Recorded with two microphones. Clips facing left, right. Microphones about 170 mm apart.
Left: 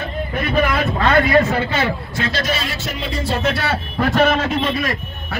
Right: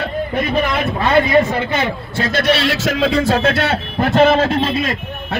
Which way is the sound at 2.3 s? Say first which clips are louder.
Right 11 dB; 70° right (ahead or behind).